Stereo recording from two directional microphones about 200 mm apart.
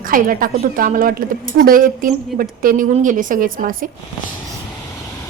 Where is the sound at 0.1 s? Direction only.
45° right (ahead or behind).